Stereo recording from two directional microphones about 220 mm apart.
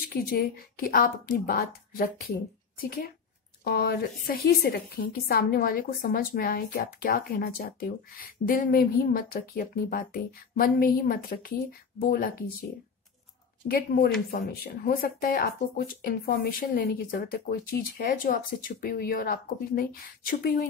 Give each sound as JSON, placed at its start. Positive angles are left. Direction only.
{"t": 0.1, "sound": "a woman's voice", "side_deg": 40}
{"t": 13.7, "sound": "a woman's voice", "side_deg": 45}